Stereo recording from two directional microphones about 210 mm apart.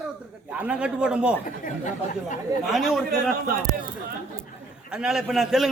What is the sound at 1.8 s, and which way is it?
Speech, 35° left (ahead or behind).